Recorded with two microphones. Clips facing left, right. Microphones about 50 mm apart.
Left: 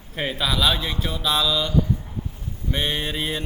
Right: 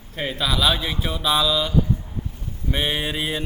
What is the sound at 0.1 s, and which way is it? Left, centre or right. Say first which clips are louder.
A man's voice: even; centre.